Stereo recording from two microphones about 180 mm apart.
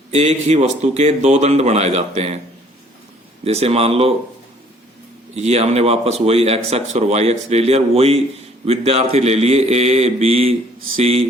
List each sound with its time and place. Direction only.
0.1 s a man's voice: 35° right (ahead or behind)
3.4 s a man's voice: 35° right (ahead or behind)
5.3 s a man's voice: 35° right (ahead or behind)